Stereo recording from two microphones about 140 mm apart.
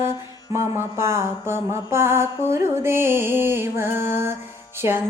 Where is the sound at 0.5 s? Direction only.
20° right (ahead or behind).